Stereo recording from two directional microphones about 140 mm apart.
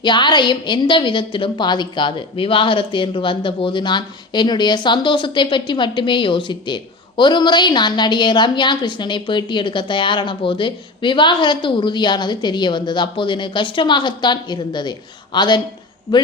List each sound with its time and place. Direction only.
0.0 s a woman's voice: 35° left (ahead or behind)